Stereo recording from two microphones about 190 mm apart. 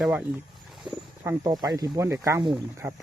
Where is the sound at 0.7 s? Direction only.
Centre (ahead or behind).